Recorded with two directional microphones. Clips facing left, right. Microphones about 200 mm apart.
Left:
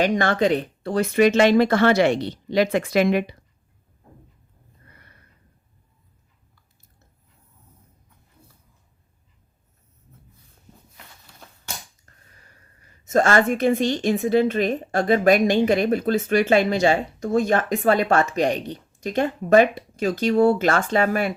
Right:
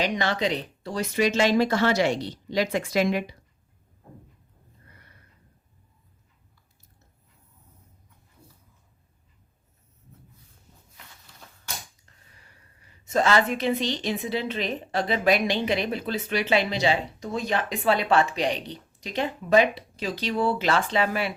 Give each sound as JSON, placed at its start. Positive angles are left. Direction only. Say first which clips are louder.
{"t": 0.0, "sound": "speech", "louder": "left 6 dB", "side_deg": 50}
{"t": 12.1, "sound": "finger snapping", "louder": "left 3 dB", "side_deg": 45}
{"t": 13.1, "sound": "a woman's voice", "louder": "left 4 dB", "side_deg": 45}